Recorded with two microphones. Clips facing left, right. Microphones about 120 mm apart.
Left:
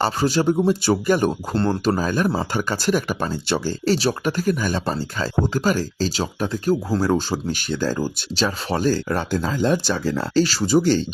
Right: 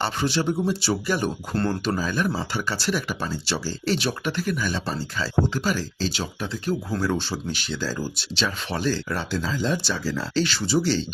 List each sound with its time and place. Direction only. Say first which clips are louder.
0.0 s speech: left 5 dB; 40° left (ahead or behind)
1.5 s speech: left 2 dB; 25° left (ahead or behind)
2.0 s speech: left 4 dB; 45° left (ahead or behind)
10.4 s speech: left 5 dB; 40° left (ahead or behind)